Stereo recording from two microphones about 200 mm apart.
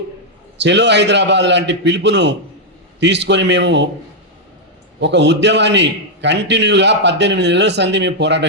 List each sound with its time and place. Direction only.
0.6 s a man's voice: 60° right (ahead or behind)
4.9 s a man's voice: 60° right (ahead or behind)